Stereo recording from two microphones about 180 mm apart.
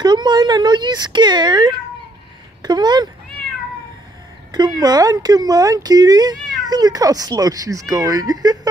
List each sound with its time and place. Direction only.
0.0 s speech: 25° right (ahead or behind)
4.5 s speech: 20° right (ahead or behind)